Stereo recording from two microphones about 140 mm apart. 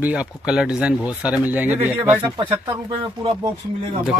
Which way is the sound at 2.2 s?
35° right (ahead or behind).